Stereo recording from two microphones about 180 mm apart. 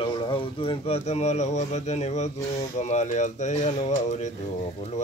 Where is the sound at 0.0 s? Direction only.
30° left (ahead or behind).